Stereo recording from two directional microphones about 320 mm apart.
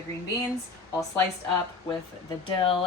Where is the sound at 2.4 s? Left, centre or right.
Centre.